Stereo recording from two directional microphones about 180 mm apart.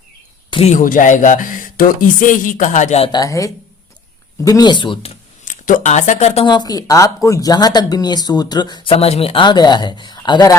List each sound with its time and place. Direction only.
0.5 s speech: 40° left (ahead or behind)
3.1 s speech: 20° left (ahead or behind)
5.5 s speech: 45° left (ahead or behind); by 10.5 s 25° left (ahead or behind)